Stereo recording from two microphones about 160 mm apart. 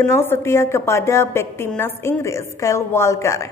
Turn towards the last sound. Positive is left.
turn(degrees=20)  # may be behind; listen again after turning